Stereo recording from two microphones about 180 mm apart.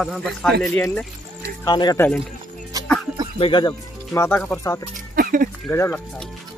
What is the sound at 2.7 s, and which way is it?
Music, 20° right (ahead or behind).